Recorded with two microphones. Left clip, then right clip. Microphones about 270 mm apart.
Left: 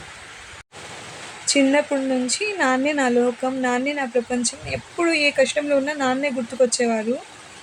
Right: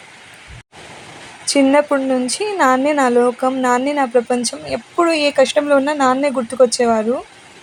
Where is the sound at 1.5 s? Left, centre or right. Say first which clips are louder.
Right 5 dB; centre.